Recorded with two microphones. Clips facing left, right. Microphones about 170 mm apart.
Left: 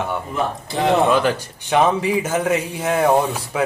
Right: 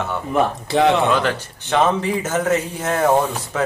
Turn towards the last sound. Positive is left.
turn(degrees=10)  # may be behind; listen again after turning